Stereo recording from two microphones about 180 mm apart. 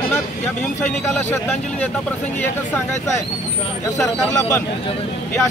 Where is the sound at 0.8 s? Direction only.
10° left (ahead or behind).